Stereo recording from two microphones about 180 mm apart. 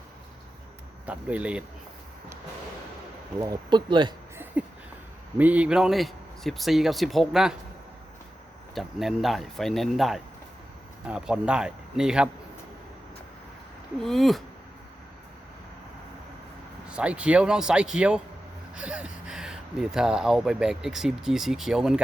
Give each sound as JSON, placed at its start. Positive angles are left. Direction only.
{"t": 1.0, "sound": "speech", "side_deg": -5}
{"t": 3.4, "sound": "speech", "side_deg": -20}
{"t": 4.6, "sound": "a sound", "side_deg": -5}
{"t": 5.4, "sound": "speech", "side_deg": -10}
{"t": 8.7, "sound": "speech", "side_deg": 0}
{"t": 14.0, "sound": "speech", "side_deg": 0}
{"t": 16.9, "sound": "speech", "side_deg": -5}